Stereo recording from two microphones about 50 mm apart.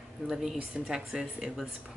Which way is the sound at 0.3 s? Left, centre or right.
Centre.